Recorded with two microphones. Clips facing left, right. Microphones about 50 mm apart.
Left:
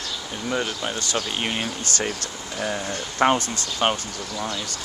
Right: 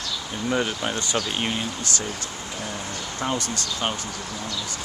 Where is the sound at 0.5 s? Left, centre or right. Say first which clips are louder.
Right 1 dB; centre.